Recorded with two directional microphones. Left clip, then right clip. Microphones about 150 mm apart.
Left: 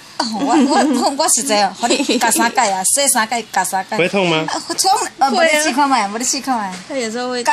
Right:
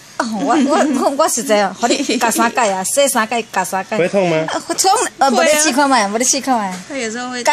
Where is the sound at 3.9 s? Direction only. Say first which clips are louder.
Right 1 dB; 15° left (ahead or behind).